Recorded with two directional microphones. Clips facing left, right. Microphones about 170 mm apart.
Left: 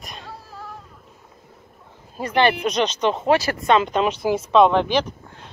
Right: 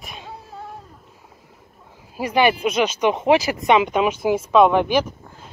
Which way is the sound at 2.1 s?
10° right (ahead or behind).